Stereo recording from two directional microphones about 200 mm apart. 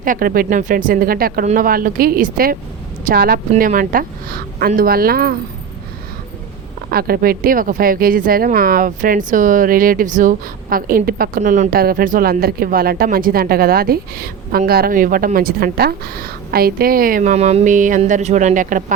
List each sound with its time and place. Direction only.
0.0 s speech: 45° right (ahead or behind)
6.9 s speech: 50° right (ahead or behind)